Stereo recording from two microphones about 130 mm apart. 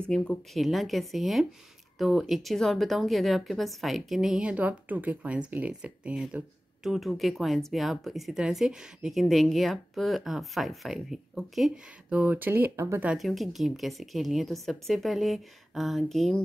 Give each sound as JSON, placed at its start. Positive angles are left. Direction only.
{"t": 0.1, "sound": "a woman's voice", "side_deg": 5}
{"t": 13.1, "sound": "a woman's voice", "side_deg": 0}